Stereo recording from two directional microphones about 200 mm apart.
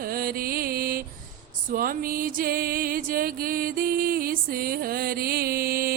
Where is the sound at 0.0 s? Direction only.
45° right (ahead or behind).